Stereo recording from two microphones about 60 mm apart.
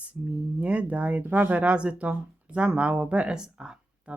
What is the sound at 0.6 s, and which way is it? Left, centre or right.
Speech, right.